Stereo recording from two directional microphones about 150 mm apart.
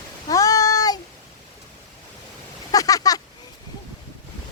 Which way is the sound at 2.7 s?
25° left (ahead or behind).